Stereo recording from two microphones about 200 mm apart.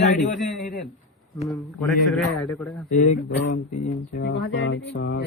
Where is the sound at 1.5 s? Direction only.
Centre (ahead or behind).